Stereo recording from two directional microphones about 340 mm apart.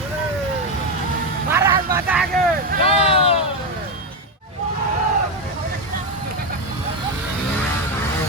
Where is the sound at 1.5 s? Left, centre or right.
Centre.